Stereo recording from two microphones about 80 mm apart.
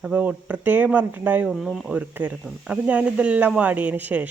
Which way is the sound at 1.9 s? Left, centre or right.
Centre.